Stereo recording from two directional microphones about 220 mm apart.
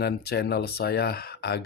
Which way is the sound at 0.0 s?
50° left (ahead or behind).